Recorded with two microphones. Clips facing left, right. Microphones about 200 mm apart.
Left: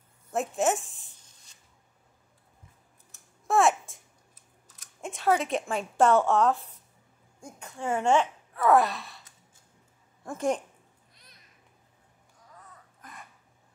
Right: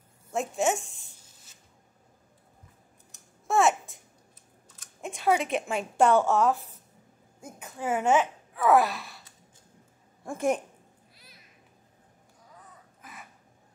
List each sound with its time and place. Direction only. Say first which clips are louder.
0.3 s a sound: even; centre (ahead or behind)
3.4 s a sound: even; centre (ahead or behind)
5.0 s a woman's voice: even; centre (ahead or behind)
10.2 s a woman's voice: right 1 dB; 10° right (ahead or behind)
11.1 s babbling: right 2 dB; 5° right (ahead or behind)
13.0 s crow: even; 5° right (ahead or behind)